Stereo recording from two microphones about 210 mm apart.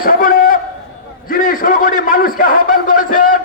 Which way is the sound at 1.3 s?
40° left (ahead or behind).